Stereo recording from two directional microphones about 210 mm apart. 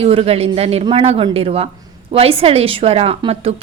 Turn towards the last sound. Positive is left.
turn(degrees=-25)  # may be behind; listen again after turning